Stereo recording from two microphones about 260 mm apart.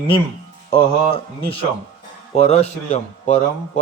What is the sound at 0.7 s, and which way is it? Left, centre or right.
A man's voice, centre.